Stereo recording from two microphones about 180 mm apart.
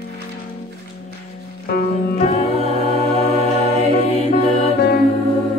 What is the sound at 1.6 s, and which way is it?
Music, 55° left (ahead or behind).